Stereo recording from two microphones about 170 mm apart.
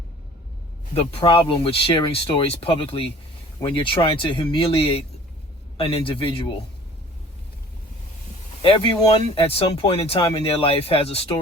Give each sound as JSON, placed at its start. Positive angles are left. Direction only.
{"t": 0.9, "sound": "speech", "side_deg": 30}
{"t": 8.6, "sound": "speech", "side_deg": 30}